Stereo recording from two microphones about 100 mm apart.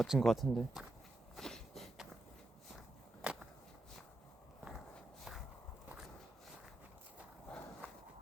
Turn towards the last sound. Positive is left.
turn(degrees=10)  # may be behind; listen again after turning